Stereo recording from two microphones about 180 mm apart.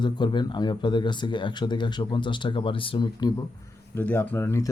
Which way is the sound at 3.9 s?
10° left (ahead or behind).